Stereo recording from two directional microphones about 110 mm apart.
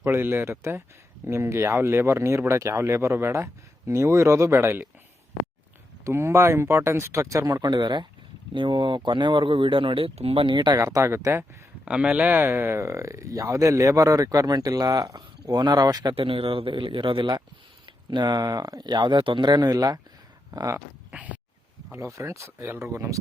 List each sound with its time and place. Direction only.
0.0 s speech: 20° right (ahead or behind)
6.1 s speech: 25° right (ahead or behind); by 10.8 s 45° right (ahead or behind)
10.8 s speech: 30° right (ahead or behind)
11.9 s speech: 10° right (ahead or behind); by 16.1 s 40° right (ahead or behind)
16.1 s speech: 55° right (ahead or behind); by 20.8 s 30° right (ahead or behind)
21.1 s a sound: 15° right (ahead or behind)
21.9 s speech: 25° right (ahead or behind)